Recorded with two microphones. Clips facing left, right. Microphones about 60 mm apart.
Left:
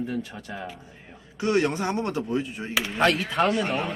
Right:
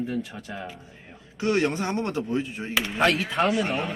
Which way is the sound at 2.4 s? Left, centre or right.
Centre.